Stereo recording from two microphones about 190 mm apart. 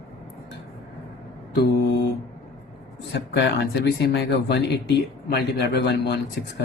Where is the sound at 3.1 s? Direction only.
65° left (ahead or behind).